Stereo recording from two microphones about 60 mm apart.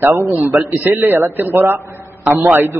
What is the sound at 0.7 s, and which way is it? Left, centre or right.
A man's voice, right.